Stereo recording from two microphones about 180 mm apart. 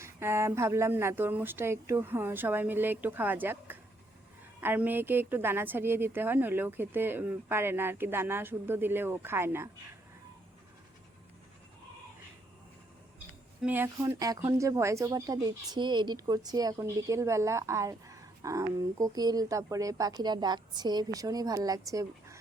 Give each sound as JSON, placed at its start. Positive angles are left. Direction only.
{"t": 0.0, "sound": "a woman's voice", "side_deg": -15}
{"t": 13.1, "sound": "speech", "side_deg": -10}